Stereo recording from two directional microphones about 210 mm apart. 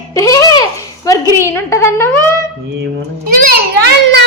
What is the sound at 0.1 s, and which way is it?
Babbling, 15° left (ahead or behind).